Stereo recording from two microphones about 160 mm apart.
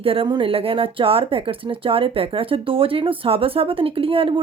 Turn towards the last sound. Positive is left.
turn(degrees=-35)  # may be behind; listen again after turning